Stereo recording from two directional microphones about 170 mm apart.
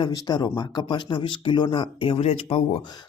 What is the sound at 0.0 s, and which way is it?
Speech, 25° left (ahead or behind).